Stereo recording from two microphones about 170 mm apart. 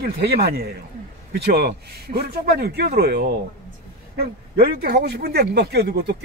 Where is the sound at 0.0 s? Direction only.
70° right (ahead or behind).